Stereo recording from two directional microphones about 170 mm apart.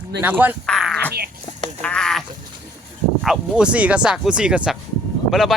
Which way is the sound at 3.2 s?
5° right (ahead or behind).